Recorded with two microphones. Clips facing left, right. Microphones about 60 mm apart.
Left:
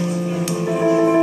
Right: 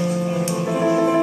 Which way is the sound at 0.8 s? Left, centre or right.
Centre.